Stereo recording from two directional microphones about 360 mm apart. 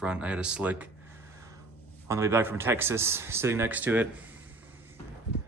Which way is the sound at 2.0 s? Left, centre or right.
Centre.